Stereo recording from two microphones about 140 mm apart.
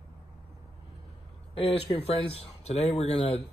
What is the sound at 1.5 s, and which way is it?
Speech, 45° left (ahead or behind).